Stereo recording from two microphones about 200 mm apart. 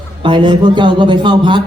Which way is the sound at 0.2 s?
25° right (ahead or behind).